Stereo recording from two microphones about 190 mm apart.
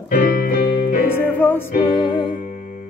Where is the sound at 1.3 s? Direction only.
10° left (ahead or behind).